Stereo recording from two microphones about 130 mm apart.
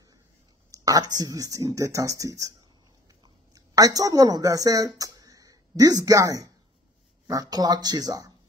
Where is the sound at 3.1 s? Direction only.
30° right (ahead or behind).